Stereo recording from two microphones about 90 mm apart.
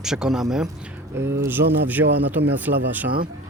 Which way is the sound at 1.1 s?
30° right (ahead or behind).